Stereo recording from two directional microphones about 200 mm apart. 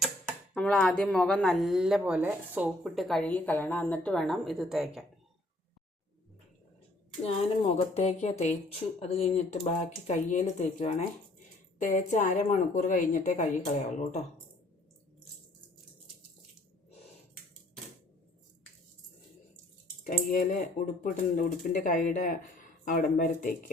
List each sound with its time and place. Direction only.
0.0 s speech: centre (ahead or behind)
7.6 s a woman's voice: 30° left (ahead or behind)
20.1 s a woman's voice: 45° left (ahead or behind)